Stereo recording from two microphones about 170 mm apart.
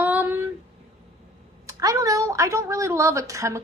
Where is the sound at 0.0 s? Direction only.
10° right (ahead or behind).